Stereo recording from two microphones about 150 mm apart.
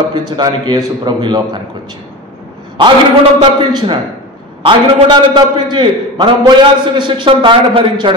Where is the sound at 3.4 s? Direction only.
30° right (ahead or behind).